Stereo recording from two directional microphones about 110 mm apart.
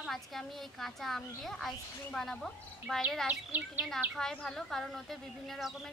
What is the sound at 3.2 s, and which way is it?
Speech, 15° right (ahead or behind).